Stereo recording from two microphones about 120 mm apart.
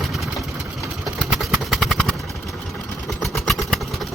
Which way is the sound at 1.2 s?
Centre (ahead or behind).